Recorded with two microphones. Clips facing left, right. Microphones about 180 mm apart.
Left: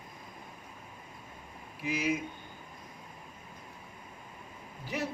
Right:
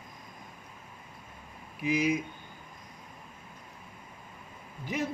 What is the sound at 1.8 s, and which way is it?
Speech, 20° right (ahead or behind).